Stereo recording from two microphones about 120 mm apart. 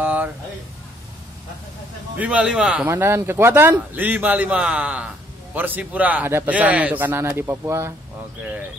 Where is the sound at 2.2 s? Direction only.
10° right (ahead or behind).